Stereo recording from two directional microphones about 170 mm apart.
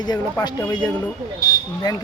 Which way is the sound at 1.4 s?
20° left (ahead or behind).